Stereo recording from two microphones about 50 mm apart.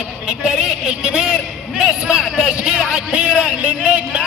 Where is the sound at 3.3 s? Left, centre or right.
Left.